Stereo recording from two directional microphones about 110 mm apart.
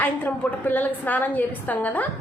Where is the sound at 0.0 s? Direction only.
15° left (ahead or behind).